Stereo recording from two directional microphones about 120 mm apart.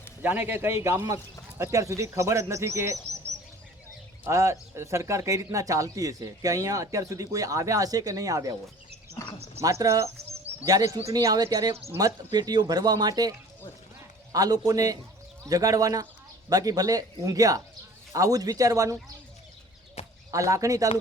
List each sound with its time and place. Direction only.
0.2 s speech: 15° right (ahead or behind)
4.2 s speech: 25° right (ahead or behind)
9.6 s speech: 25° right (ahead or behind)
14.3 s speech: 30° right (ahead or behind)
20.0 s a sound: 60° left (ahead or behind)
20.3 s speech: 25° right (ahead or behind)